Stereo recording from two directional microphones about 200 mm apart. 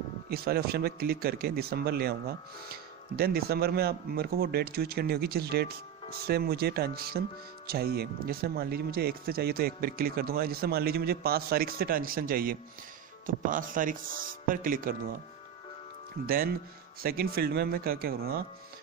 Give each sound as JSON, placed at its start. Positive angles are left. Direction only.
{"t": 0.3, "sound": "speech", "side_deg": -50}
{"t": 17.0, "sound": "speech", "side_deg": -50}